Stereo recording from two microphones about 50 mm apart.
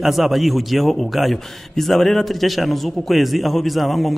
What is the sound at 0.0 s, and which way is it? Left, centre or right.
A man's voice, centre.